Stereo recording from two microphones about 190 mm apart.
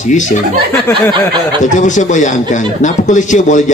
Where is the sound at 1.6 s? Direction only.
40° left (ahead or behind).